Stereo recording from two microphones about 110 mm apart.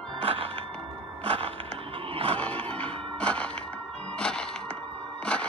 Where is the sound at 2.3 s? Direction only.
10° left (ahead or behind).